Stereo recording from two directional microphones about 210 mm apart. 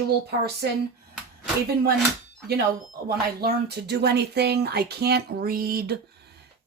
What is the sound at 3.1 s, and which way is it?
Speech, 50° right (ahead or behind).